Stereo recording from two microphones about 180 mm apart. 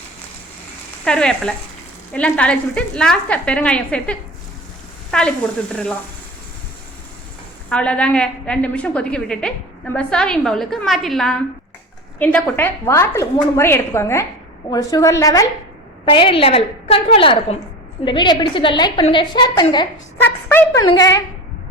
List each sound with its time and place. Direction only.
1.0 s a woman's voice: 5° left (ahead or behind)
7.7 s a woman's voice: 5° left (ahead or behind); by 19.6 s 25° left (ahead or behind)
20.2 s a woman's voice: 10° left (ahead or behind)
20.8 s a woman's voice: 20° left (ahead or behind)